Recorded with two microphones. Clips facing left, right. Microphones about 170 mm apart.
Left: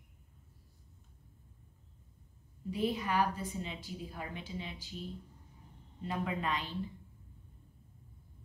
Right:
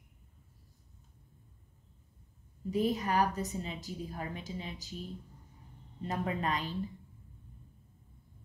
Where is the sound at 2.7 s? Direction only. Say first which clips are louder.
Right 3 dB; 45° right (ahead or behind).